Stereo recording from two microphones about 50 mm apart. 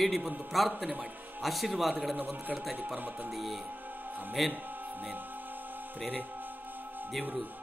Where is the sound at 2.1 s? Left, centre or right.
Right.